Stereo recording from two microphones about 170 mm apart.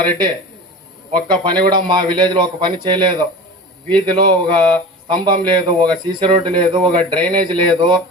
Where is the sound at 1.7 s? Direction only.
25° right (ahead or behind).